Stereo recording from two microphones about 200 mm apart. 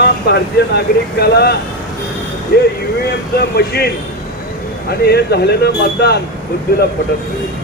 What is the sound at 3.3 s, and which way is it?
Speech, 55° left (ahead or behind).